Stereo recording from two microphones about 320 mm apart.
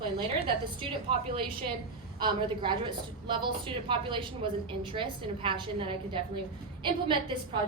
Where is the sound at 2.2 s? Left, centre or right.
Centre.